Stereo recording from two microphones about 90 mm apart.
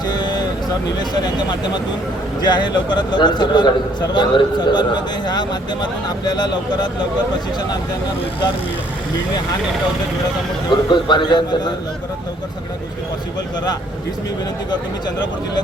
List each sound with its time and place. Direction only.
0.1 s a sound: 55° left (ahead or behind)
2.4 s speech: 55° left (ahead or behind)
10.8 s speech: 55° left (ahead or behind)